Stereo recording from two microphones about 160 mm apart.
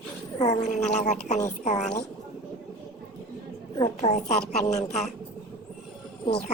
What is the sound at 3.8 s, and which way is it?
A woman's voice, 45° left (ahead or behind).